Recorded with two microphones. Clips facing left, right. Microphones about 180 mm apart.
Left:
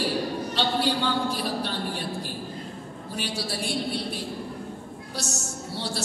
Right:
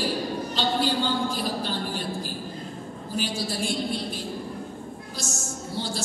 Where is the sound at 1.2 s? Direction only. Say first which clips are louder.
Even; 70° left (ahead or behind).